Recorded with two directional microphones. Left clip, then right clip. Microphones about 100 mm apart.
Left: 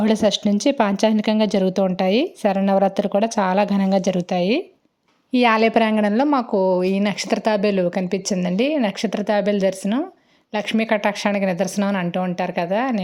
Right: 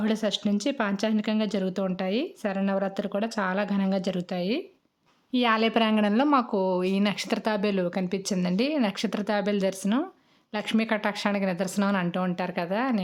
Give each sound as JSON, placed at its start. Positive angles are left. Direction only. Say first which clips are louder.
{"t": 0.0, "sound": "a woman's voice", "louder": "left 9 dB", "side_deg": 35}